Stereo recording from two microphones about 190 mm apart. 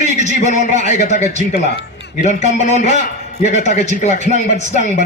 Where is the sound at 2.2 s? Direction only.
35° left (ahead or behind).